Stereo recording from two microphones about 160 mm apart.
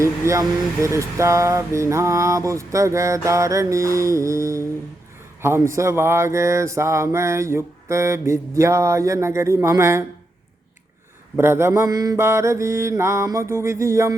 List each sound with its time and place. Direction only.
0.0 s speech: 20° right (ahead or behind)
5.4 s mantra: 15° right (ahead or behind)
11.3 s mantra: 15° right (ahead or behind)